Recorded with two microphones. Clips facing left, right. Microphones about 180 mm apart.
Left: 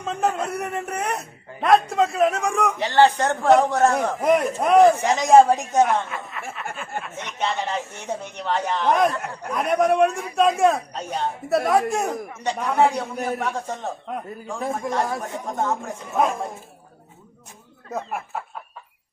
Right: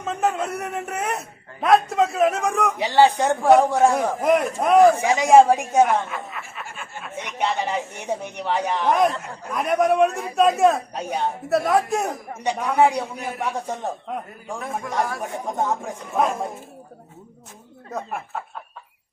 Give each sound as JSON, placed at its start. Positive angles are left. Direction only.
{"t": 0.0, "sound": "a man's voice", "side_deg": 0}
{"t": 4.9, "sound": "a man's voice", "side_deg": -10}
{"t": 8.9, "sound": "a man's voice", "side_deg": 0}
{"t": 12.4, "sound": "a man's voice", "side_deg": -10}
{"t": 14.6, "sound": "a man's voice", "side_deg": 25}
{"t": 15.2, "sound": "a man's voice", "side_deg": -15}
{"t": 16.1, "sound": "a man's voice", "side_deg": 0}